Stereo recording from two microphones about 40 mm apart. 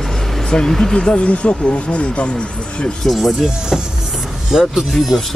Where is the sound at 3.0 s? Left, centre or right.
Centre.